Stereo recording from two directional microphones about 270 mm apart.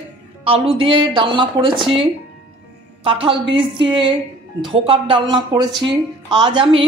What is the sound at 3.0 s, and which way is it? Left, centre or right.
A woman's voice, centre.